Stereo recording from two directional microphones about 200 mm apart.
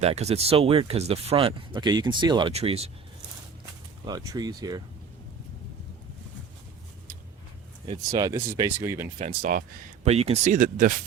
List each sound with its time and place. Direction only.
0.0 s speech: 30° right (ahead or behind)
4.0 s speech: 20° right (ahead or behind)
7.9 s speech: 20° right (ahead or behind)
9.1 s speech: 40° right (ahead or behind)
10.1 s speech: 30° right (ahead or behind)